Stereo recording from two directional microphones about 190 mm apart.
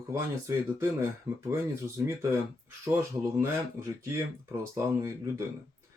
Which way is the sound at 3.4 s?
15° right (ahead or behind).